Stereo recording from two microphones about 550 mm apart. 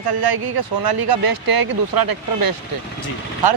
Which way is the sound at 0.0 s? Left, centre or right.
Right.